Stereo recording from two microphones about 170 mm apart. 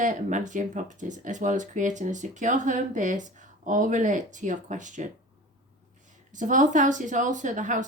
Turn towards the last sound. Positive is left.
turn(degrees=-50)  # may be behind; listen again after turning